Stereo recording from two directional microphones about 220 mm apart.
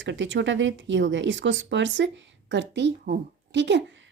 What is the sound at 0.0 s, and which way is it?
A woman's voice, 55° right (ahead or behind).